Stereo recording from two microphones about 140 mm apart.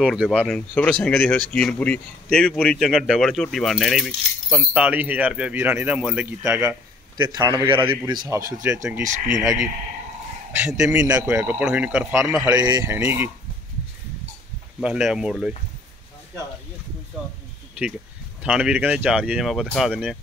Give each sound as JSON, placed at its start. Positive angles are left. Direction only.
{"t": 0.0, "sound": "speech", "side_deg": -5}
{"t": 0.5, "sound": "a man's voice", "side_deg": 10}
{"t": 8.3, "sound": "speech", "side_deg": -25}
{"t": 10.5, "sound": "speech", "side_deg": -10}
{"t": 12.4, "sound": "speech", "side_deg": -30}
{"t": 12.8, "sound": "speech", "side_deg": -15}
{"t": 14.8, "sound": "speech", "side_deg": -5}
{"t": 18.4, "sound": "speech", "side_deg": -5}